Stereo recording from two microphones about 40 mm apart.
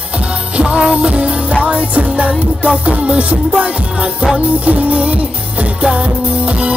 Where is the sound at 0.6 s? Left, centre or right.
Right.